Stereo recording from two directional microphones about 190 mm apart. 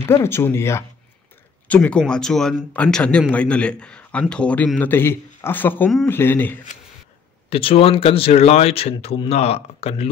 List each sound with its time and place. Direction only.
0.0 s speech: 15° left (ahead or behind)
7.4 s speech: 30° left (ahead or behind)